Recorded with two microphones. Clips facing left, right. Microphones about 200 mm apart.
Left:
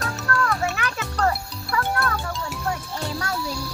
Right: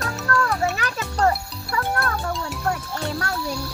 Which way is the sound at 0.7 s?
35° right (ahead or behind).